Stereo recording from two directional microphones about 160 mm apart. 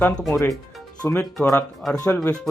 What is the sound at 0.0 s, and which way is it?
Speech, 15° left (ahead or behind).